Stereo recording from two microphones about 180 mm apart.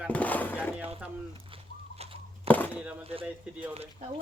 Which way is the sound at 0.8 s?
30° right (ahead or behind).